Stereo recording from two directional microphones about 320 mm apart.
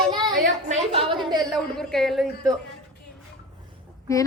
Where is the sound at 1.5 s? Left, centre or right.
Centre.